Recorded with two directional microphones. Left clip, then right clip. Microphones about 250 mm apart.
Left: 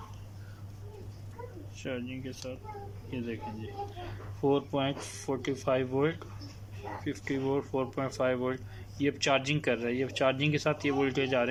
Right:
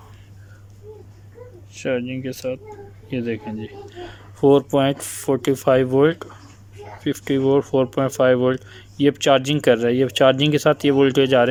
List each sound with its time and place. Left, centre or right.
1.7 s speech: right